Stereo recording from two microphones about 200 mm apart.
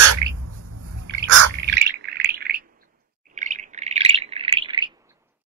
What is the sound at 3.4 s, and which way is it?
Bird, 35° right (ahead or behind).